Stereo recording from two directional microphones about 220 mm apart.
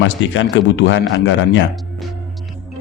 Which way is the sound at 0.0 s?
55° left (ahead or behind).